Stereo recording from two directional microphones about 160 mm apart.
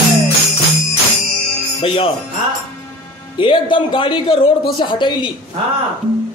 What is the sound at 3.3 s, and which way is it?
A man's voice, 30° left (ahead or behind).